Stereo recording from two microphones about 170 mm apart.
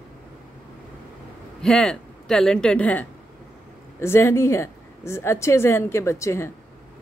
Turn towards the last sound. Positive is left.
turn(degrees=15)  # may be behind; listen again after turning